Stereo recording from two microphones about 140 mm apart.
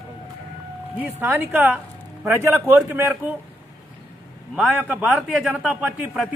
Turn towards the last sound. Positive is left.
turn(degrees=-5)  # may be behind; listen again after turning